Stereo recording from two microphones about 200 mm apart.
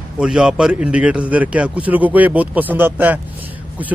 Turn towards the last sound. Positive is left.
turn(degrees=-10)  # may be behind; listen again after turning